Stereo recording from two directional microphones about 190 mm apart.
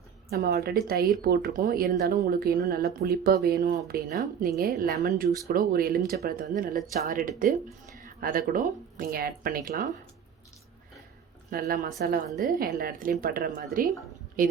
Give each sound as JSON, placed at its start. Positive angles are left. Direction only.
{"t": 0.3, "sound": "speech", "side_deg": -55}
{"t": 11.5, "sound": "speech", "side_deg": -45}